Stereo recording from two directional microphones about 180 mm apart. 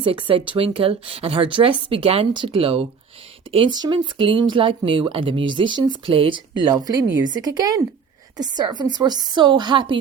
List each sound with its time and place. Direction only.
0.0 s speech: 30° right (ahead or behind)